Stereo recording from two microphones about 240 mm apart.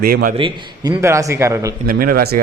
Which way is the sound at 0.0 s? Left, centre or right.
Right.